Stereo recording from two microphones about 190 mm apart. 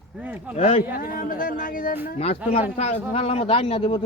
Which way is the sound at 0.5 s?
30° left (ahead or behind).